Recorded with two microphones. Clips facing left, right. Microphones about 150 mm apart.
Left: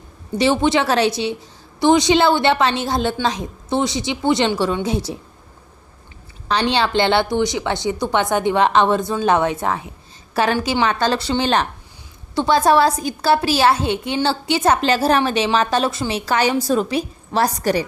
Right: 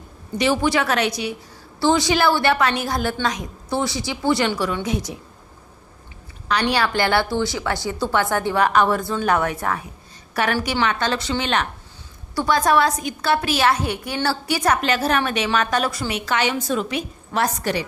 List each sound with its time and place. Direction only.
0.3 s a woman's voice: 25° left (ahead or behind)
6.5 s a woman's voice: 25° left (ahead or behind)